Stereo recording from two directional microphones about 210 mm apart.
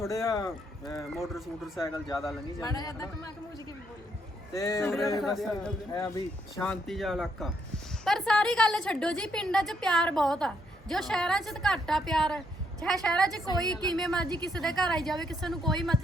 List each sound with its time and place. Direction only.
0.1 s speech: 15° left (ahead or behind)
1.2 s a woman's voice: centre (ahead or behind)
1.8 s speech: 15° left (ahead or behind)
4.5 s speech: 15° left (ahead or behind)
4.9 s a woman's voice: centre (ahead or behind)
5.9 s a woman's voice: 15° left (ahead or behind)
13.2 s a woman's voice: 15° right (ahead or behind)
13.8 s a woman's voice: centre (ahead or behind)
14.3 s a woman's voice: 20° right (ahead or behind)
14.5 s a woman's voice: centre (ahead or behind)